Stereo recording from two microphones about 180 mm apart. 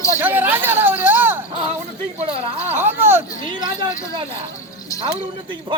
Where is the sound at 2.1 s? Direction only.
35° right (ahead or behind).